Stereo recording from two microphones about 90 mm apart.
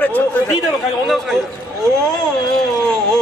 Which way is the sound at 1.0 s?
Centre (ahead or behind).